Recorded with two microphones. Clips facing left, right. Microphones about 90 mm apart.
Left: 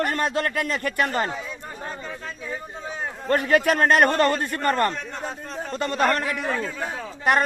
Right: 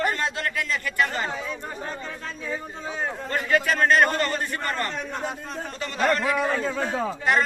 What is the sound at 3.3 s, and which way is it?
A man's voice, 55° left (ahead or behind).